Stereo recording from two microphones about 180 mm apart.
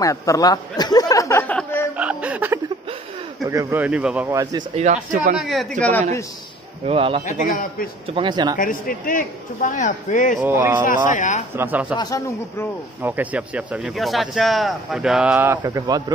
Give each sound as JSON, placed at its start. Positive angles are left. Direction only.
{"t": 0.0, "sound": "a sound", "side_deg": 20}
{"t": 1.6, "sound": "snicker", "side_deg": 10}
{"t": 2.0, "sound": "chuckle", "side_deg": -5}
{"t": 3.4, "sound": "speech", "side_deg": -15}
{"t": 4.3, "sound": "speech", "side_deg": -20}
{"t": 4.7, "sound": "speech", "side_deg": -40}
{"t": 5.4, "sound": "speech", "side_deg": 0}
{"t": 6.9, "sound": "a man's voice", "side_deg": -30}
{"t": 8.5, "sound": "a man's voice", "side_deg": 50}
{"t": 10.4, "sound": "speech", "side_deg": -10}
{"t": 10.9, "sound": "a man's voice", "side_deg": 45}
{"t": 11.5, "sound": "speech", "side_deg": -10}
{"t": 12.0, "sound": "speech", "side_deg": 20}
{"t": 13.0, "sound": "speech", "side_deg": -10}